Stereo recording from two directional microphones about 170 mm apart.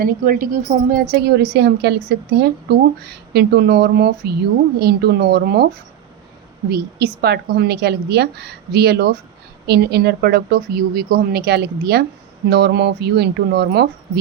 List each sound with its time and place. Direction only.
0.0 s a woman's voice: 55° right (ahead or behind)
6.7 s a woman's voice: 70° right (ahead or behind)